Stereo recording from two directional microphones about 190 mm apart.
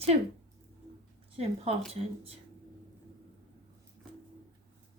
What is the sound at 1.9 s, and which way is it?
Speech, 30° right (ahead or behind).